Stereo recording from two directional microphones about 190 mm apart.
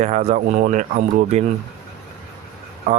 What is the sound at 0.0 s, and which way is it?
Speech, 35° right (ahead or behind).